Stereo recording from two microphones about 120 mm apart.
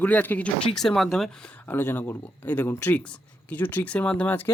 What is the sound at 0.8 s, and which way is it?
Speech, 5° left (ahead or behind).